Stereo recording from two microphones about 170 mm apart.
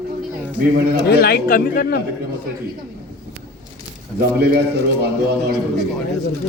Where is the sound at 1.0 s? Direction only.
70° left (ahead or behind).